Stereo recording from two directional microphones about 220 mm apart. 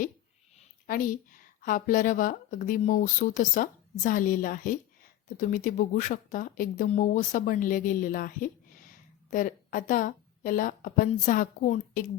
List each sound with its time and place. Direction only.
0.9 s a woman's voice: 40° left (ahead or behind)